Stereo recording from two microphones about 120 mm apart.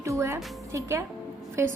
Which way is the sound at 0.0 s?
25° right (ahead or behind).